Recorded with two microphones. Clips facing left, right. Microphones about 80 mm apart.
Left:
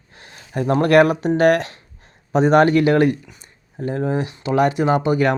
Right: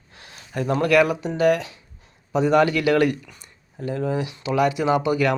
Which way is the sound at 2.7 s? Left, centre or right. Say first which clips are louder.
Left 4 dB; left.